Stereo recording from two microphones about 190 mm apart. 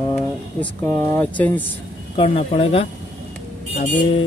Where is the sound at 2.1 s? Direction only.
30° left (ahead or behind).